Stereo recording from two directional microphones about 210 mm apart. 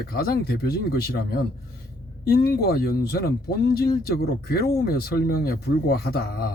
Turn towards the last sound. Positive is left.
turn(degrees=45)  # may be behind; listen again after turning